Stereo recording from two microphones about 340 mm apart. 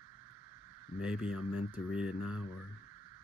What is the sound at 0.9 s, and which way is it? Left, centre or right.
Speech, centre.